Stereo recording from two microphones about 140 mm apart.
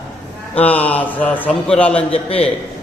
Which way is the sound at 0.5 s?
10° left (ahead or behind).